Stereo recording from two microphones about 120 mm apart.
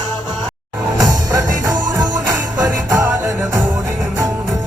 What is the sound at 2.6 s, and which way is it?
Music, 25° right (ahead or behind).